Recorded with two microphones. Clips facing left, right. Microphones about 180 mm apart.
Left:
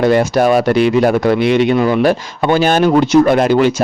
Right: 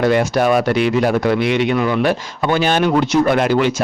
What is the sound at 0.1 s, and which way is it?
Speech, 40° left (ahead or behind).